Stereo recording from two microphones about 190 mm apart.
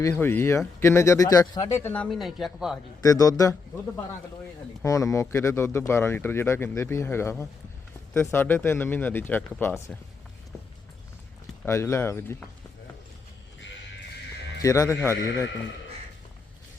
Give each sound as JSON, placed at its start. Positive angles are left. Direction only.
{"t": 0.0, "sound": "speech", "side_deg": 15}
{"t": 3.0, "sound": "speech", "side_deg": 20}
{"t": 4.8, "sound": "speech", "side_deg": 15}
{"t": 11.6, "sound": "speech", "side_deg": 15}
{"t": 14.6, "sound": "speech", "side_deg": 15}